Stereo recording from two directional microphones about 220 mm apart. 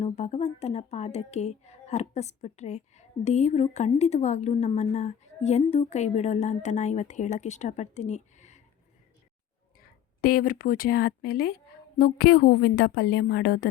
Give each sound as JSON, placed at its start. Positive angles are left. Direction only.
{"t": 0.0, "sound": "speech", "side_deg": 30}
{"t": 10.2, "sound": "a woman's voice", "side_deg": 40}